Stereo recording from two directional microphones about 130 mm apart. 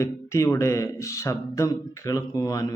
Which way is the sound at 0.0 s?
20° left (ahead or behind).